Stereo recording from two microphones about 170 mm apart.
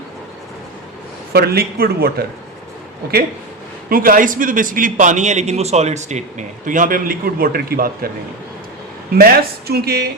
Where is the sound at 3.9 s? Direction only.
55° right (ahead or behind).